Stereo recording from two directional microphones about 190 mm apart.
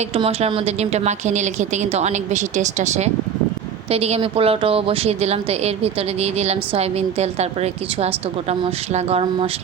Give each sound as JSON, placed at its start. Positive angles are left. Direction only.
{"t": 0.1, "sound": "a woman's voice", "side_deg": -30}